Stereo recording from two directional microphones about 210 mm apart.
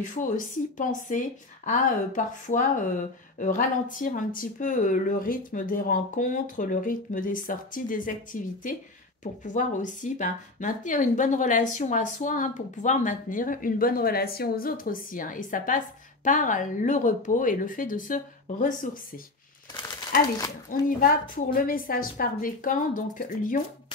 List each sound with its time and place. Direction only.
0.0 s speech: 40° left (ahead or behind)
20.3 s speech: 15° left (ahead or behind)
21.0 s speech: 40° left (ahead or behind)